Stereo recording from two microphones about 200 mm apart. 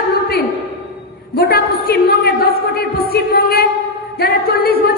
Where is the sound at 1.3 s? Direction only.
50° left (ahead or behind).